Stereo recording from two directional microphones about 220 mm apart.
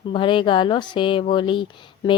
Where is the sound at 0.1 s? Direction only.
20° left (ahead or behind).